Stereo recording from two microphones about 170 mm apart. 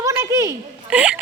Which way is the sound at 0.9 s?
5° right (ahead or behind).